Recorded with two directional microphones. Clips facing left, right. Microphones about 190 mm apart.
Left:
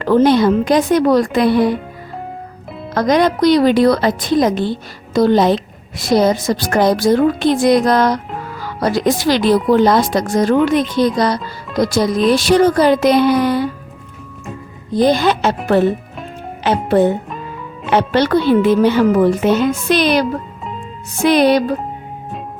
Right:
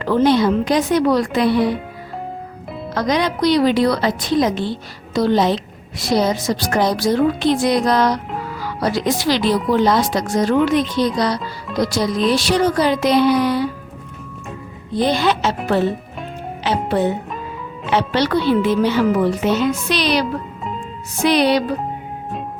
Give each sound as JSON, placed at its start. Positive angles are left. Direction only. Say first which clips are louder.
{"t": 0.0, "sound": "a woman's voice", "louder": "left 3 dB", "side_deg": 45}
{"t": 2.9, "sound": "a woman's voice", "louder": "left 5 dB", "side_deg": 50}
{"t": 14.9, "sound": "a woman's voice", "louder": "left 4 dB", "side_deg": 45}
{"t": 16.6, "sound": "a woman's voice", "louder": "left 5 dB", "side_deg": 50}
{"t": 21.2, "sound": "a woman's voice", "louder": "left 4 dB", "side_deg": 50}